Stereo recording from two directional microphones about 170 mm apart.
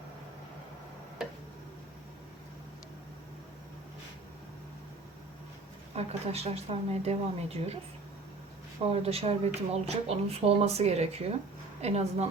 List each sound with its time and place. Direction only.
5.9 s speech: 40° right (ahead or behind)
8.9 s speech: 35° right (ahead or behind)